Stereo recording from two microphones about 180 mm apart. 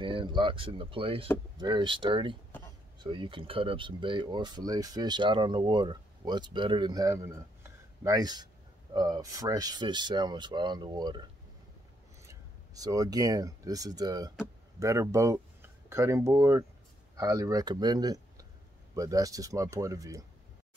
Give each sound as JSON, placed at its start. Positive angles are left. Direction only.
{"t": 0.0, "sound": "speech", "side_deg": -25}
{"t": 12.3, "sound": "speech", "side_deg": -20}